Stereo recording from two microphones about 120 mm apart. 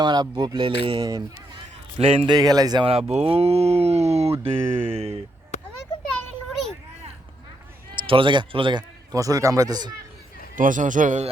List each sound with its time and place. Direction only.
0.0 s speech: 40° right (ahead or behind)
2.3 s speech: 35° right (ahead or behind)
2.8 s speech: 55° right (ahead or behind)
4.5 s speech: 20° right (ahead or behind)
4.9 s speech: 55° right (ahead or behind)
5.5 s a sound: 70° left (ahead or behind)
7.9 s speech: 45° right (ahead or behind)
9.1 s speech: 30° right (ahead or behind)
10.5 s speech: 90° right